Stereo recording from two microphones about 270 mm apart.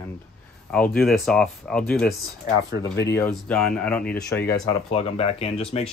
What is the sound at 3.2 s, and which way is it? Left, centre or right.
Speech, centre.